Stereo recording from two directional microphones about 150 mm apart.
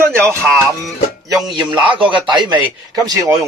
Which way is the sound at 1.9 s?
35° right (ahead or behind).